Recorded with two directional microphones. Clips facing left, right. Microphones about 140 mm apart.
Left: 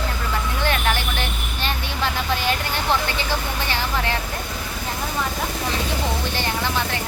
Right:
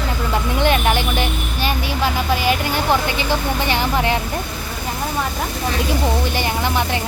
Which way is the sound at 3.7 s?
15° right (ahead or behind).